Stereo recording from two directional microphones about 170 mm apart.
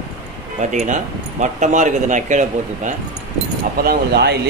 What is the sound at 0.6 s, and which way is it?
Speech, 45° right (ahead or behind).